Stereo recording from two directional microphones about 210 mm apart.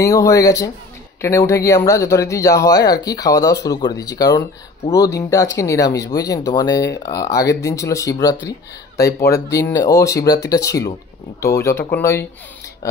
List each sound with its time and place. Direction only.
0.0 s speech: 15° left (ahead or behind)